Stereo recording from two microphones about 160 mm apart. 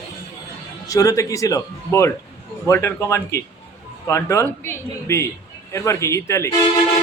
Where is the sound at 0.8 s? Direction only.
20° left (ahead or behind).